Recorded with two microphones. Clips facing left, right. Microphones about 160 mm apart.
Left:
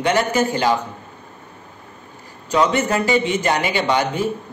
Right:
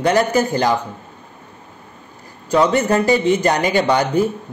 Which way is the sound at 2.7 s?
40° right (ahead or behind).